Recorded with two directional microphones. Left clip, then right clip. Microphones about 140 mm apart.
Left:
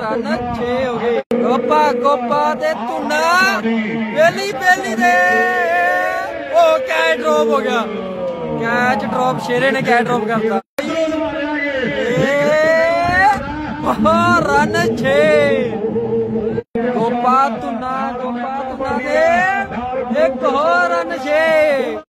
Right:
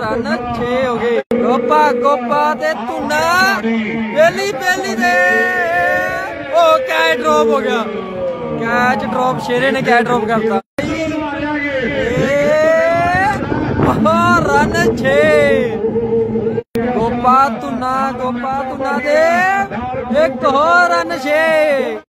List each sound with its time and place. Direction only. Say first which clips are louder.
1.4 s speech: right 2 dB; 10° right (ahead or behind)
4.2 s speech: right 2 dB; 25° right (ahead or behind)
12.2 s boat: right 1 dB; centre (ahead or behind)
13.8 s speech: even; 5° right (ahead or behind)
17.0 s a sound: right 3 dB; 20° right (ahead or behind)
19.0 s speech: right 2 dB; 45° right (ahead or behind)
20.2 s a man's voice: right 3 dB; 35° right (ahead or behind)
21.3 s speech: even; 20° right (ahead or behind)